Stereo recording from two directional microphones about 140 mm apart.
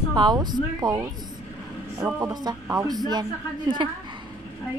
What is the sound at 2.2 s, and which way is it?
Speech, 25° right (ahead or behind).